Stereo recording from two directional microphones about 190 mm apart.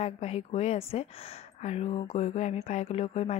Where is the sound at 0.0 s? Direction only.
35° left (ahead or behind).